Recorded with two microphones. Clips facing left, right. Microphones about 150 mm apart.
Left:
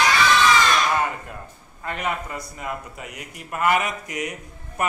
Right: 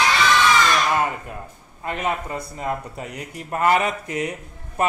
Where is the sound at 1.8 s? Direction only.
25° right (ahead or behind).